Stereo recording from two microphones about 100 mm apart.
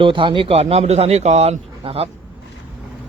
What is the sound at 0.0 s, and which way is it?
A man's voice, 55° right (ahead or behind).